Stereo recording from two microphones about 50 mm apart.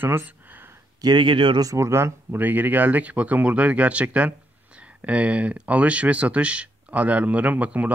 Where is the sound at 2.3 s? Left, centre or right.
Right.